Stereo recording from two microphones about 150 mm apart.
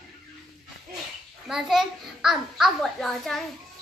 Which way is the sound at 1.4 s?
Centre (ahead or behind).